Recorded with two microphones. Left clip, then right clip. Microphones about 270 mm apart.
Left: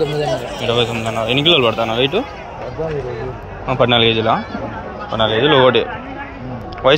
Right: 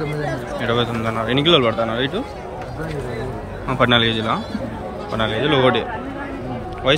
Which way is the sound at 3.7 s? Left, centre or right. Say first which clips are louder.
Left 3 dB; centre.